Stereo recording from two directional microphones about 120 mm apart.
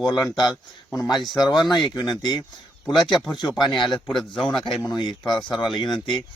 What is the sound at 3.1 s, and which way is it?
Speech, centre (ahead or behind).